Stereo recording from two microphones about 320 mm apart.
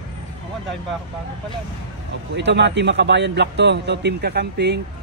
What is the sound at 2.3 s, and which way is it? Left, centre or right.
A man's voice, right.